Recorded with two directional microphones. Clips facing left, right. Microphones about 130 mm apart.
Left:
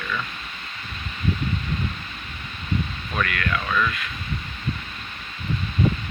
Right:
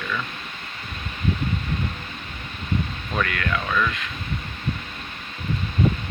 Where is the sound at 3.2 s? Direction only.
20° right (ahead or behind).